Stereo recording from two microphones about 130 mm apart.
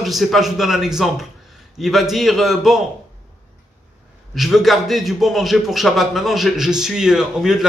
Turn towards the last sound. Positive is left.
turn(degrees=-5)  # may be behind; listen again after turning